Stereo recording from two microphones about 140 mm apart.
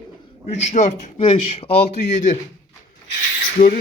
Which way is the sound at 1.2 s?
45° left (ahead or behind).